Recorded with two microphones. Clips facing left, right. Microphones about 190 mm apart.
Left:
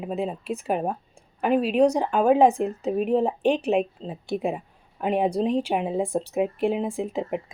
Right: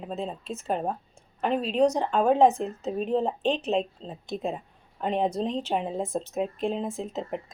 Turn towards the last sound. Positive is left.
turn(degrees=15)  # may be behind; listen again after turning